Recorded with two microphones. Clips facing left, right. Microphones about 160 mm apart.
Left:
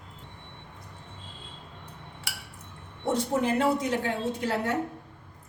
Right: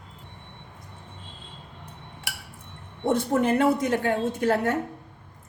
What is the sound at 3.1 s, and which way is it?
A woman's voice, 55° right (ahead or behind).